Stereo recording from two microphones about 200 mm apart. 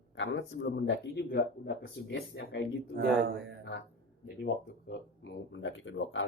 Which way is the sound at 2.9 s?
60° right (ahead or behind).